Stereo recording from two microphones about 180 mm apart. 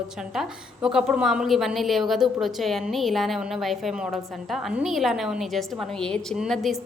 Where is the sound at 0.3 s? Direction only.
5° right (ahead or behind).